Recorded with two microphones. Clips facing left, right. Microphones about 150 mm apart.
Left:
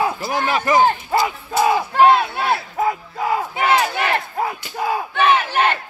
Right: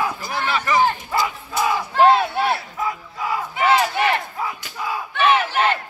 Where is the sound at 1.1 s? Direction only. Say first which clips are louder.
Left 4 dB; 30° left (ahead or behind).